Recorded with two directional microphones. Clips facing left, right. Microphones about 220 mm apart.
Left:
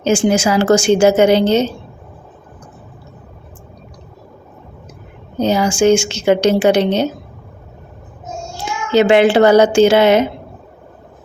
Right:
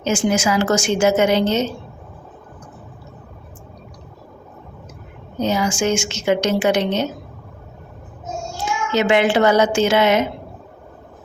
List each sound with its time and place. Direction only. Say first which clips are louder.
0.0 s a woman's voice: left 5 dB; 30° left (ahead or behind)
5.4 s a woman's voice: left 6 dB; 30° left (ahead or behind)
8.9 s a woman's voice: left 6 dB; 30° left (ahead or behind)